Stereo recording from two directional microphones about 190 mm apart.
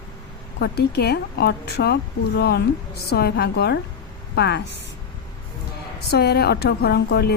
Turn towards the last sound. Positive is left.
turn(degrees=60)  # may be behind; listen again after turning